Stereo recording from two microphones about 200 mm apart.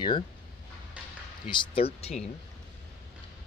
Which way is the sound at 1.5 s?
25° left (ahead or behind).